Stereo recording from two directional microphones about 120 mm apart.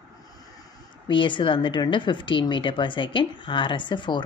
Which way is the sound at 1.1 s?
40° left (ahead or behind).